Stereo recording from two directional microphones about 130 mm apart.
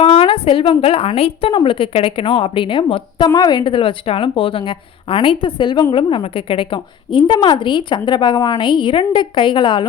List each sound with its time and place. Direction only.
0.0 s a woman's voice: 45° left (ahead or behind)